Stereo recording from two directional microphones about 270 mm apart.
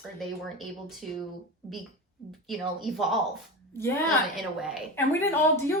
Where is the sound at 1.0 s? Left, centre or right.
Centre.